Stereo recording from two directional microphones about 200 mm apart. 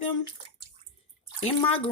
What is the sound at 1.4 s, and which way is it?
Speech, 30° left (ahead or behind).